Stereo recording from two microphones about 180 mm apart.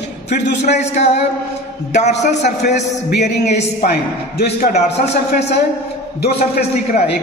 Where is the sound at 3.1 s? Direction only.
70° left (ahead or behind).